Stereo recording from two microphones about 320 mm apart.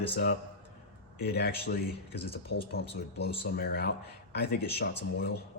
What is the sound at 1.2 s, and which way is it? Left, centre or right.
Speech, left.